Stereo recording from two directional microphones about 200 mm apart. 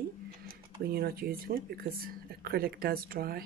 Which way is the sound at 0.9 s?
50° right (ahead or behind).